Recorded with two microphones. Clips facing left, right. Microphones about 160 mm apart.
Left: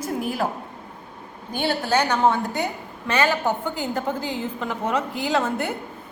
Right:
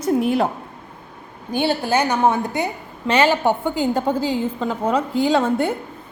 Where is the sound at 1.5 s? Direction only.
15° right (ahead or behind).